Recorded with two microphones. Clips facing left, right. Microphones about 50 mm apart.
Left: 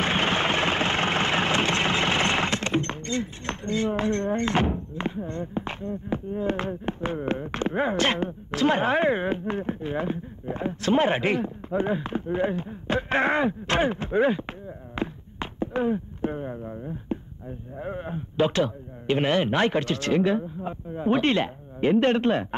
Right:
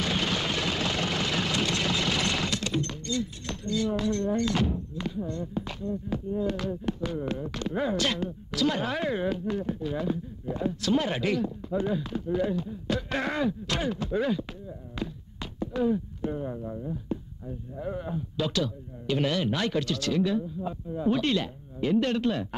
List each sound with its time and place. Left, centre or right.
0.0 s vehicle: left
15.0 s a sound: left
17.7 s speech: left